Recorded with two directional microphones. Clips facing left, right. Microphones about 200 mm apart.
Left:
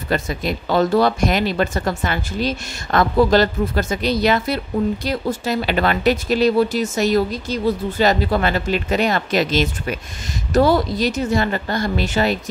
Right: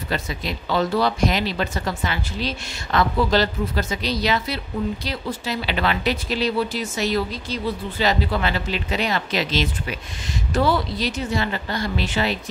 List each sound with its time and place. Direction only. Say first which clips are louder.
0.1 s speech: left 6 dB; 50° left (ahead or behind)